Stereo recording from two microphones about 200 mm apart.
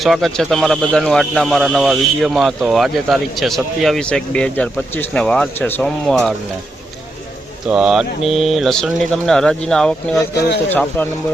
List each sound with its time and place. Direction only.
0.0 s speech: centre (ahead or behind)
7.7 s speech: 5° right (ahead or behind)
10.3 s speech: 55° left (ahead or behind)
10.7 s speech: 10° left (ahead or behind)